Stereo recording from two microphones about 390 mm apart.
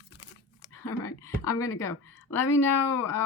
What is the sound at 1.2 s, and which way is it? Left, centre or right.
Speech, centre.